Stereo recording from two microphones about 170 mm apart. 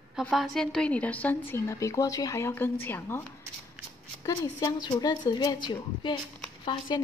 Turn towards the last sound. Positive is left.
turn(degrees=25)  # may be behind; listen again after turning